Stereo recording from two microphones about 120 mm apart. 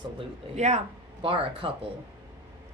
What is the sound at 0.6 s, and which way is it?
Speech, 70° right (ahead or behind).